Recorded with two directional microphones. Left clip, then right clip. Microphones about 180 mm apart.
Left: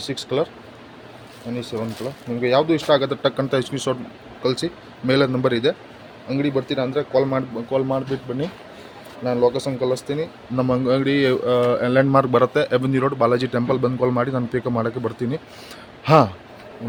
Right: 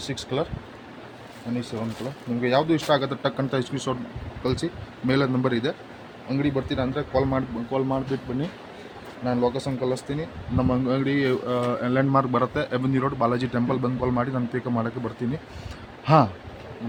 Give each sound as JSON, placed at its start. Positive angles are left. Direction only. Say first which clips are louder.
{"t": 0.0, "sound": "speech", "louder": "left 5 dB", "side_deg": 50}
{"t": 1.5, "sound": "speech", "louder": "left 4 dB", "side_deg": 50}